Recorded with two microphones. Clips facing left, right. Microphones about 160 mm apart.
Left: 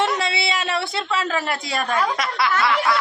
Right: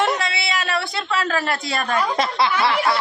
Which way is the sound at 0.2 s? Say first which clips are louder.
Left 1 dB; 30° left (ahead or behind).